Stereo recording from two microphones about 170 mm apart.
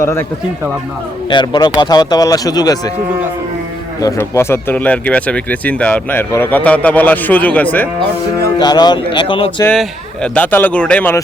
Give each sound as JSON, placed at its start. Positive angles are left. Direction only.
{"t": 0.0, "sound": "speech", "side_deg": 15}
{"t": 1.3, "sound": "speech", "side_deg": 25}
{"t": 4.0, "sound": "speech", "side_deg": 15}
{"t": 8.5, "sound": "speech", "side_deg": 25}
{"t": 10.2, "sound": "speech", "side_deg": 10}